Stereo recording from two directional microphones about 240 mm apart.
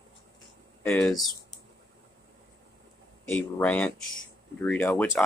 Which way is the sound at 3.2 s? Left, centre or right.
Centre.